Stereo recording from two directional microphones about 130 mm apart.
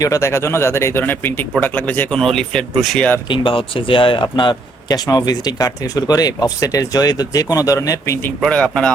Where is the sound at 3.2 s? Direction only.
40° left (ahead or behind); by 8.3 s 20° left (ahead or behind).